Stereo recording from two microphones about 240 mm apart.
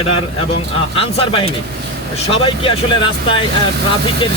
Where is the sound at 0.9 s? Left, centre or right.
Left.